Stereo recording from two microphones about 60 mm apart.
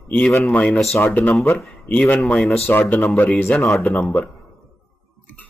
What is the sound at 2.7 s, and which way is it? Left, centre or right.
A man's voice, left.